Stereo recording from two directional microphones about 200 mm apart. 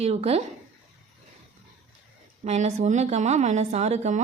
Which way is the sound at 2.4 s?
35° right (ahead or behind).